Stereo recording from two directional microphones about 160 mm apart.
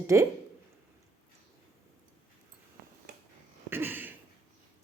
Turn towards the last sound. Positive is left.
turn(degrees=-10)  # may be behind; listen again after turning